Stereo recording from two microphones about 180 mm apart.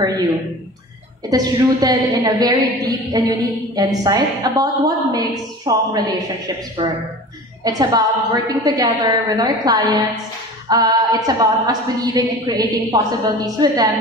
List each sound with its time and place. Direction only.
1.3 s a woman's voice: 20° right (ahead or behind)